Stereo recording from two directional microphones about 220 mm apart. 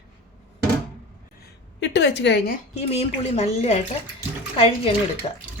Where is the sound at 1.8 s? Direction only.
50° left (ahead or behind).